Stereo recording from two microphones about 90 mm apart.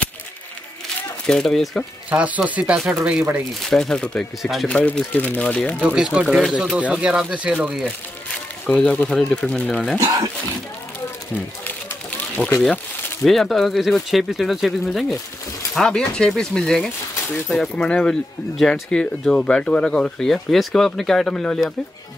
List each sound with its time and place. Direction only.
1.2 s speech: 5° left (ahead or behind)
2.0 s speech: 15° right (ahead or behind)
2.6 s speech: 5° right (ahead or behind)
4.6 s speech: 10° left (ahead or behind)
5.8 s speech: 10° right (ahead or behind)
8.6 s speech: 10° left (ahead or behind)
12.6 s speech: 5° left (ahead or behind)